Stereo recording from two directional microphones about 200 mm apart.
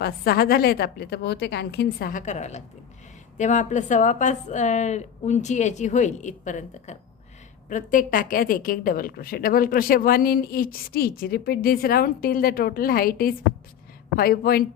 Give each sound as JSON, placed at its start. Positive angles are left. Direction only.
{"t": 0.0, "sound": "a woman's voice", "side_deg": 50}